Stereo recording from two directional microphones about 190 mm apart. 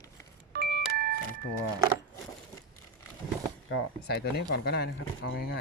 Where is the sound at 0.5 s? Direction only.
55° right (ahead or behind).